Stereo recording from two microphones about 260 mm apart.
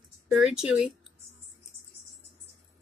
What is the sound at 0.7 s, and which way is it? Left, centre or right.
Speech, centre.